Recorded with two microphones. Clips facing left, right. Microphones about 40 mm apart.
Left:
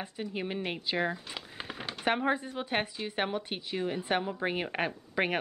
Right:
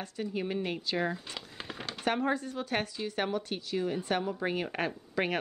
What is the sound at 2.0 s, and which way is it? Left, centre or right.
A woman's voice, left.